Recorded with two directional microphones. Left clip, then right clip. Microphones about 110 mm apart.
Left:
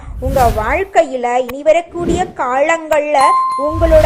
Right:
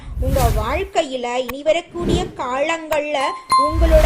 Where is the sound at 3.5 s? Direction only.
Centre (ahead or behind).